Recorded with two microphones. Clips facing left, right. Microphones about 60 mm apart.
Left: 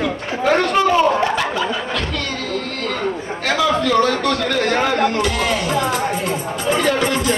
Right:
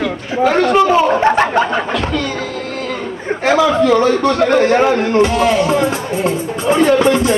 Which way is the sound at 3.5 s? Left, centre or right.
Right.